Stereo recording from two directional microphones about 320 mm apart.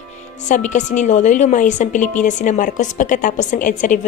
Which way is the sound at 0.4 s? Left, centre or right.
Left.